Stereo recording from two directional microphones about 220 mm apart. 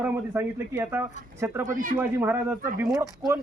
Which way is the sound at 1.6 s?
35° right (ahead or behind).